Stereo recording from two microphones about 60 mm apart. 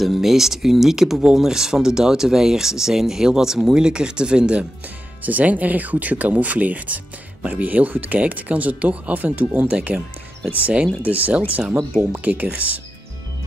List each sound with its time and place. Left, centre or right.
0.0 s speech: centre; by 12.8 s right